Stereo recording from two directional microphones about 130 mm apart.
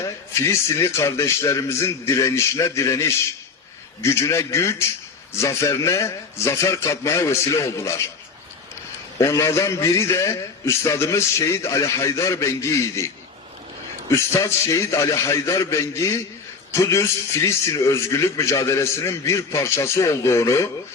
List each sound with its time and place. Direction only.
0.0 s a man's voice: 20° left (ahead or behind)
9.1 s a man's voice: 25° left (ahead or behind)
14.1 s a man's voice: 25° left (ahead or behind)